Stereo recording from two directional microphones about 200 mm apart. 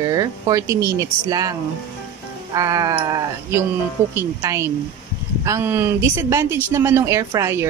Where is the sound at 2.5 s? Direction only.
15° right (ahead or behind).